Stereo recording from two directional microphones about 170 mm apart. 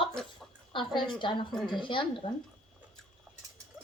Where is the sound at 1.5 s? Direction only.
Centre (ahead or behind).